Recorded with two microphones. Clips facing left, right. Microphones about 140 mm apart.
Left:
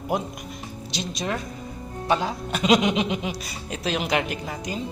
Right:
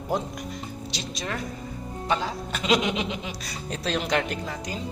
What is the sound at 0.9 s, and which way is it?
A woman's voice, 20° left (ahead or behind).